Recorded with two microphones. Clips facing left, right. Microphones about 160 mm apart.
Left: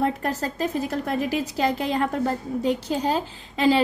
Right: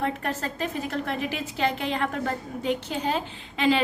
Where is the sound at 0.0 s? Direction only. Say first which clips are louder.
Left 4 dB; 35° left (ahead or behind).